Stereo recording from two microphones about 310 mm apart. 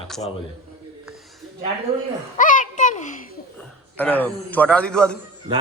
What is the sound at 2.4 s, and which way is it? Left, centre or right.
Speech, left.